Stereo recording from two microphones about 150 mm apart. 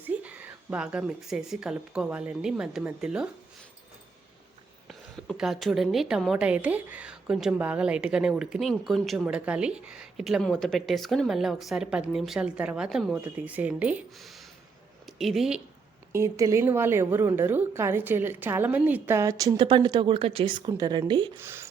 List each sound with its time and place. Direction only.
0.0 s speech: 10° right (ahead or behind)
4.9 s a woman's voice: centre (ahead or behind)
14.2 s a sound: centre (ahead or behind)
15.0 s speech: centre (ahead or behind)
16.1 s a woman's voice: 20° right (ahead or behind)
21.3 s a woman's voice: 15° right (ahead or behind)